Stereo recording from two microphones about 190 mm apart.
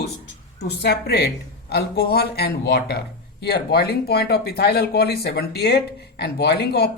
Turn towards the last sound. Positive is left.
turn(degrees=60)  # may be behind; listen again after turning